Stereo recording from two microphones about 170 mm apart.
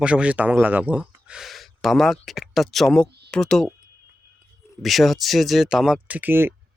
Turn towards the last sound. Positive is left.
turn(degrees=-10)  # may be behind; listen again after turning